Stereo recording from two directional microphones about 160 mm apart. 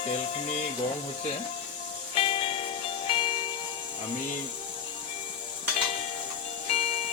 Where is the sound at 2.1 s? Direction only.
35° left (ahead or behind).